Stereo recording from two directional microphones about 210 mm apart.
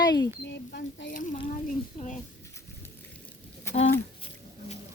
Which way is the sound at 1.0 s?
40° left (ahead or behind).